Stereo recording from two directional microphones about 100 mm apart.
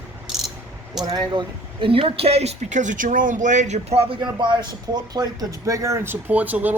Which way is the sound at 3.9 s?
85° right.